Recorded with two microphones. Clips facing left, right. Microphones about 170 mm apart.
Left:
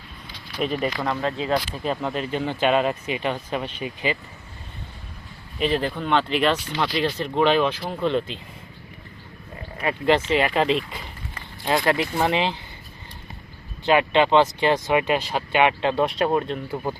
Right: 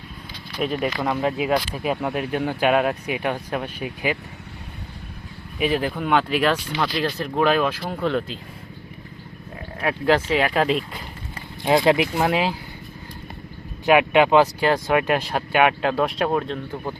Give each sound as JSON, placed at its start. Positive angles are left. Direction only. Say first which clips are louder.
{"t": 0.6, "sound": "speech", "louder": "right 1 dB", "side_deg": 0}
{"t": 5.5, "sound": "speech", "louder": "right 1 dB", "side_deg": -5}
{"t": 9.6, "sound": "speech", "louder": "right 1 dB", "side_deg": 0}
{"t": 11.3, "sound": "speech", "louder": "right 4 dB", "side_deg": -15}
{"t": 12.2, "sound": "speech", "louder": "right 1 dB", "side_deg": -5}
{"t": 13.8, "sound": "speech", "louder": "right 2 dB", "side_deg": -10}